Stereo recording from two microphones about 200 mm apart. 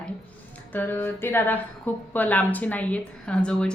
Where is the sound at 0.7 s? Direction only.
10° left (ahead or behind).